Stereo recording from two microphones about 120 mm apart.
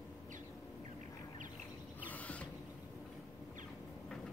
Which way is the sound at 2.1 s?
10° left (ahead or behind).